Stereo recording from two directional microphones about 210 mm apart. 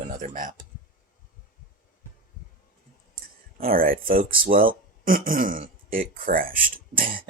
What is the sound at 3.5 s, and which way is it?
Speech, 45° right (ahead or behind).